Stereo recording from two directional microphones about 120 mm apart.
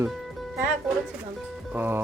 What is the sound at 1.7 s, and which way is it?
Speech, 15° right (ahead or behind).